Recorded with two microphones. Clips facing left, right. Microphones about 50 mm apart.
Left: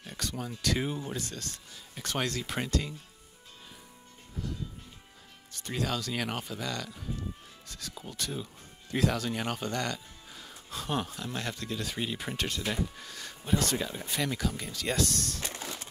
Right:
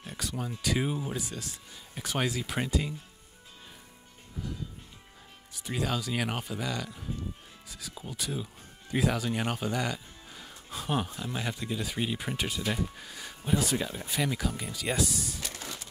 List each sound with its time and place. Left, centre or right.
0.0 s speech: centre
5.5 s speech: centre